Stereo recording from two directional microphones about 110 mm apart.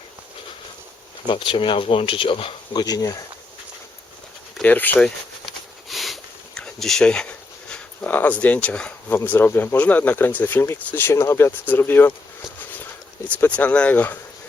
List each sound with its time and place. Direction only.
1.3 s speech: 50° left (ahead or behind)
2.7 s speech: 35° left (ahead or behind)
4.6 s speech: 15° left (ahead or behind)
5.9 s sniff: centre (ahead or behind)
9.1 s speech: 20° left (ahead or behind)
13.2 s speech: 15° left (ahead or behind)